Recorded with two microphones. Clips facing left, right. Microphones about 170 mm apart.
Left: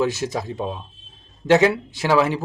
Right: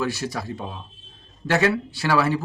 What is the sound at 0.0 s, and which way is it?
Speech, 20° left (ahead or behind).